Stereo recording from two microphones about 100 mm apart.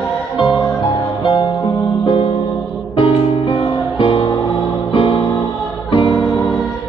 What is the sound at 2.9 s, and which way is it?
Music, 55° left (ahead or behind).